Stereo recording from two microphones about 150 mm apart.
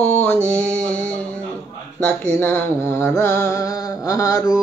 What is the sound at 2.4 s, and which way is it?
Music, 15° left (ahead or behind).